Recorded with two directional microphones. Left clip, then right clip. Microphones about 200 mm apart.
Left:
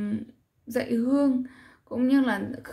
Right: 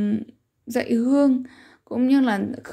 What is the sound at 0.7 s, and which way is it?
A woman's voice, 35° right (ahead or behind).